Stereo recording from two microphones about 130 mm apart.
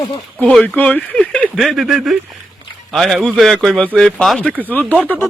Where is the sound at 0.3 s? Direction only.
10° left (ahead or behind).